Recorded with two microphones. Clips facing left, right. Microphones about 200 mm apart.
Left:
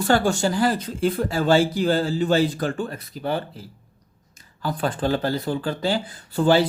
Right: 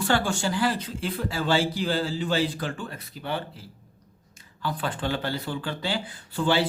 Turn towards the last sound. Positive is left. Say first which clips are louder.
# left 6 dB
turn(degrees=40)  # may be behind; listen again after turning